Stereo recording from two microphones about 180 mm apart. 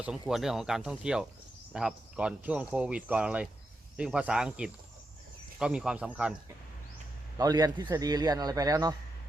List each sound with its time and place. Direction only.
0.0 s speech: 5° right (ahead or behind)
7.3 s a man's voice: 20° right (ahead or behind)